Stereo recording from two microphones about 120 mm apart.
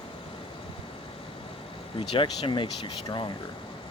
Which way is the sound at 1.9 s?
45° left (ahead or behind).